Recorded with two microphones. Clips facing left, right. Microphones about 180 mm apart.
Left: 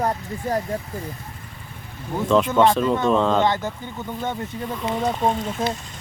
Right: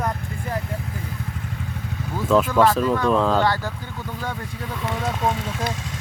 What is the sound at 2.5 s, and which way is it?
Speech, 25° left (ahead or behind).